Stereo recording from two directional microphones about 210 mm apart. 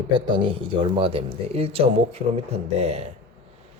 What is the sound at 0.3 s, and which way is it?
Speech, 25° right (ahead or behind).